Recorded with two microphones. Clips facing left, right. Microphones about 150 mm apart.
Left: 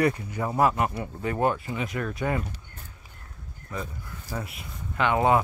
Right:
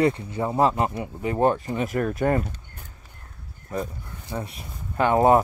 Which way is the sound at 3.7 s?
45° right (ahead or behind).